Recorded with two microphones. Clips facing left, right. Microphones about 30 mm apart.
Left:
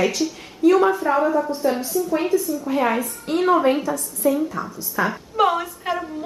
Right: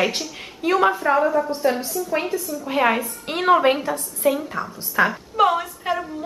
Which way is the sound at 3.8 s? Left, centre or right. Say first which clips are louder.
Even; right.